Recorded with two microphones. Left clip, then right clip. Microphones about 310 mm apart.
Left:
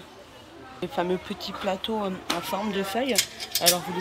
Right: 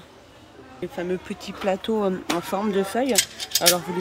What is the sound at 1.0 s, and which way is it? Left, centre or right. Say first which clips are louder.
Speech: left 2 dB; centre.